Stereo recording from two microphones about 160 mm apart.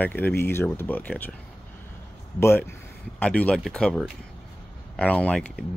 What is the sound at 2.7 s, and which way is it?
Speech, 10° left (ahead or behind).